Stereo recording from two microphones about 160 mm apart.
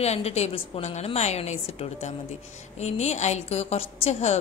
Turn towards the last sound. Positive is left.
turn(degrees=45)  # may be behind; listen again after turning